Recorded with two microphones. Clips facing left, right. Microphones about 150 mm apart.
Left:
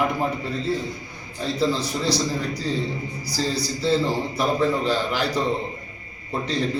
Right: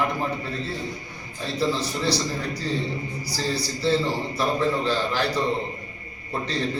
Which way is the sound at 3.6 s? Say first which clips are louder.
Left 1 dB; 15° left (ahead or behind).